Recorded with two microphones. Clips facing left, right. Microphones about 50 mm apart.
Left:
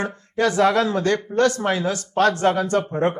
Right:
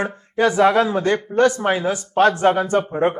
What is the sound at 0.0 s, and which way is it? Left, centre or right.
A man's voice, centre.